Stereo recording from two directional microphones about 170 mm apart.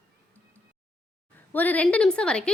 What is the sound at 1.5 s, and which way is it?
A woman's voice, 10° left (ahead or behind).